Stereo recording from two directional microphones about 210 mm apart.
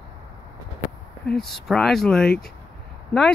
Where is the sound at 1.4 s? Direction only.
Centre (ahead or behind).